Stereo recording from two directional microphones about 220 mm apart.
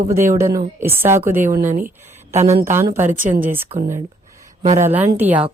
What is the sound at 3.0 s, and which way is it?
Speech, 35° right (ahead or behind).